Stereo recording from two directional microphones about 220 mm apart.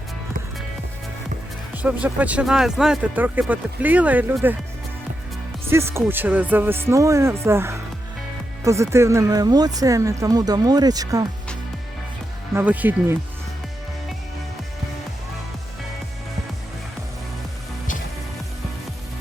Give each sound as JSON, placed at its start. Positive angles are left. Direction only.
{"t": 1.7, "sound": "speech", "side_deg": -5}
{"t": 5.6, "sound": "speech", "side_deg": -10}
{"t": 12.5, "sound": "speech", "side_deg": -5}